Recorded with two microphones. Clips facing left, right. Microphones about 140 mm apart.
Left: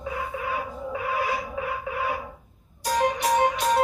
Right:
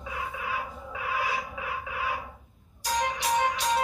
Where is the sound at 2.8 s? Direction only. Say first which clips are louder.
Left 6 dB; 50° left (ahead or behind).